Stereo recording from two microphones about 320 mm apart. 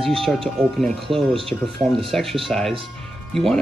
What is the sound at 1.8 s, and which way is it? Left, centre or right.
Speech, centre.